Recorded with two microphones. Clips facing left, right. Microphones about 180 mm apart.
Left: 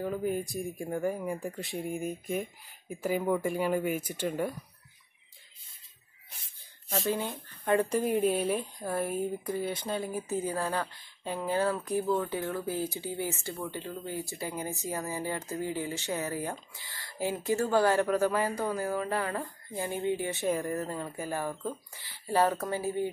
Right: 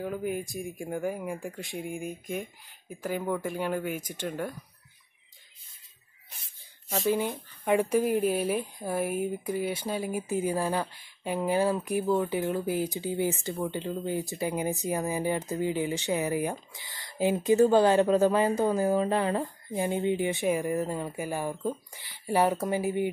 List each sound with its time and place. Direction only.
0.0 s speech: centre (ahead or behind)
2.9 s speech: 10° left (ahead or behind)
7.1 s speech: 10° right (ahead or behind)